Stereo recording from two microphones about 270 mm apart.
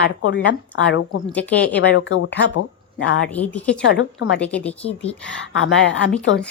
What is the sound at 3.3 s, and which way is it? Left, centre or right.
A woman's voice, centre.